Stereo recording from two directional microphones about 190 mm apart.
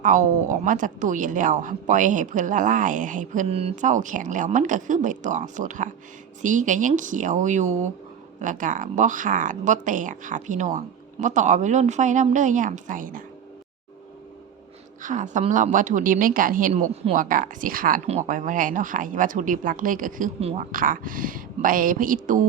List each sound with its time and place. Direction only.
0.0 s a woman's voice: 40° right (ahead or behind)
15.0 s a woman's voice: 40° right (ahead or behind)